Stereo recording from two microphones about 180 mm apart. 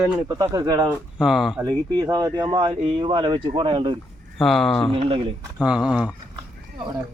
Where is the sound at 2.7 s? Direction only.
30° right (ahead or behind).